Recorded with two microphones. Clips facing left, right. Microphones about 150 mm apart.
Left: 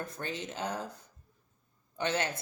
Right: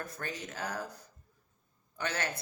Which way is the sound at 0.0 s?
20° left (ahead or behind).